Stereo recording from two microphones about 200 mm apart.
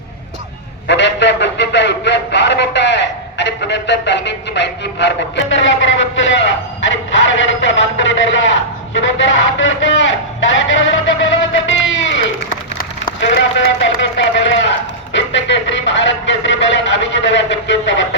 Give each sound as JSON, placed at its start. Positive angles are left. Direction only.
{"t": 0.9, "sound": "a man's voice", "side_deg": 60}
{"t": 9.0, "sound": "a sound", "side_deg": 65}
{"t": 13.6, "sound": "a man's voice", "side_deg": 65}